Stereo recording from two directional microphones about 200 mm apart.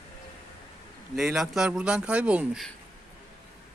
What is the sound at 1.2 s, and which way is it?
Speech, centre (ahead or behind).